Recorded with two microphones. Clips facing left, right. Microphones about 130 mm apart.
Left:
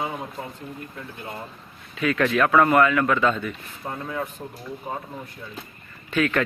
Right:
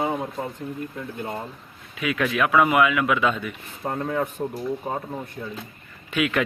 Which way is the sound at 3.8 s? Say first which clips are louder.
Right 5 dB; 45° right (ahead or behind).